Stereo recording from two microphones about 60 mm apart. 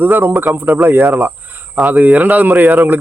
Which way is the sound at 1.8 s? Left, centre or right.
Right.